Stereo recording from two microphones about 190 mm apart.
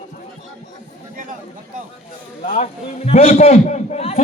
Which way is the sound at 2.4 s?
35° left (ahead or behind).